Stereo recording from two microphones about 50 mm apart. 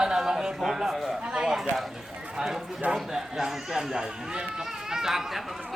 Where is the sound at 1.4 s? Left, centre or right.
Centre.